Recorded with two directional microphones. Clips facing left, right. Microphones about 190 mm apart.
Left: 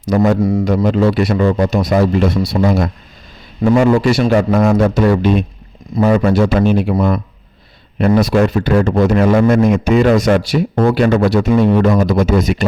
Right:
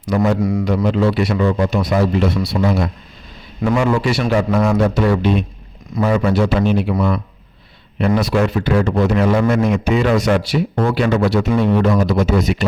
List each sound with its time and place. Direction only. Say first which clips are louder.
0.0 s a man's voice: left 3 dB; 40° left (ahead or behind)
7.9 s speech: left 4 dB; 45° left (ahead or behind)